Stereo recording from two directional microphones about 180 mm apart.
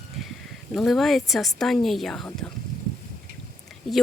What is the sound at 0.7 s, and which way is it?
Speech, centre (ahead or behind).